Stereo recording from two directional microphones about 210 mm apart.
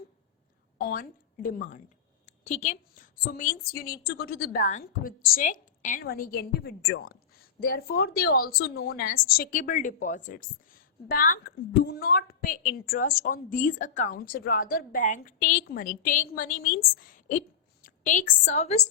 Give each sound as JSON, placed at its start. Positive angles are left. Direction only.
{"t": 0.8, "sound": "a woman's voice", "side_deg": 40}